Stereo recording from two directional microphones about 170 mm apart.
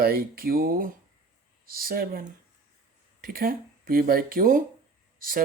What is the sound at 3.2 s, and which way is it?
Speech, 60° right (ahead or behind).